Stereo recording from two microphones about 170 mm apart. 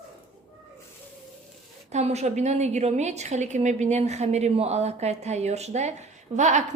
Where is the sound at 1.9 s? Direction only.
40° right (ahead or behind).